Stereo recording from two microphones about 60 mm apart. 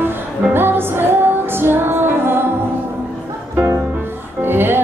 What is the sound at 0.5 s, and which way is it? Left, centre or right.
Music, right.